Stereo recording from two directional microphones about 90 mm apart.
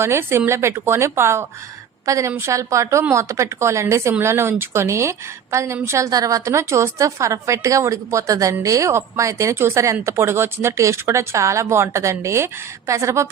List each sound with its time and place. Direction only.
0.0 s a woman's voice: 30° right (ahead or behind)